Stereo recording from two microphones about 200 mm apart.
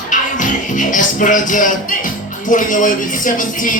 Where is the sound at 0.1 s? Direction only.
40° left (ahead or behind).